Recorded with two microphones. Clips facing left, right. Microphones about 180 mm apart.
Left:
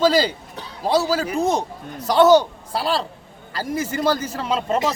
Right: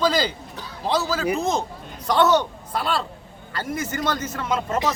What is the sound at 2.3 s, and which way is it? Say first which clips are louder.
A man's voice: left 6 dB; 30° left (ahead or behind).